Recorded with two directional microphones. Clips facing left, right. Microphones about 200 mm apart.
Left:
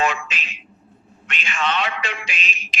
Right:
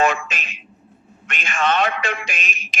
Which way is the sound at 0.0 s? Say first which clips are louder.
Right 3 dB; 45° right (ahead or behind).